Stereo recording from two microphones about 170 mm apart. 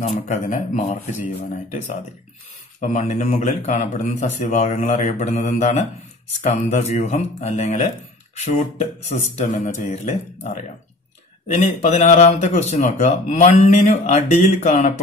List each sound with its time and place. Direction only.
0.0 s speech: 45° left (ahead or behind)
2.8 s speech: 45° left (ahead or behind)